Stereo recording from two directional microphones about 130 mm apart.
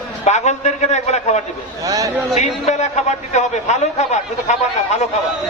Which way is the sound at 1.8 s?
25° right (ahead or behind).